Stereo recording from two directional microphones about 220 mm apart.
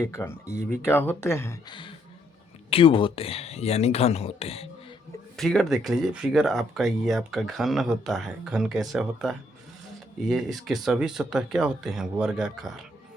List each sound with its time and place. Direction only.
0.0 s speech: 10° left (ahead or behind); by 4.7 s 25° left (ahead or behind)
5.4 s speech: centre (ahead or behind)